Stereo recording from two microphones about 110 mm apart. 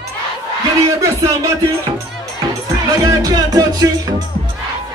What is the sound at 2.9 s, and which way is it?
Music, 35° right (ahead or behind).